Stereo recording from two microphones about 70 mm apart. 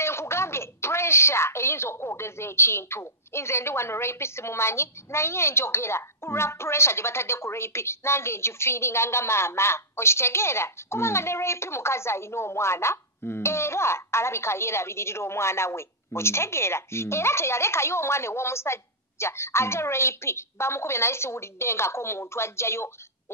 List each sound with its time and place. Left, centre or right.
0.0 s a woman's voice: left